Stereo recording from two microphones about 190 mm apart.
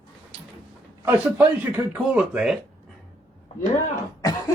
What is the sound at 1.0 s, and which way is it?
A man's voice, 10° right (ahead or behind).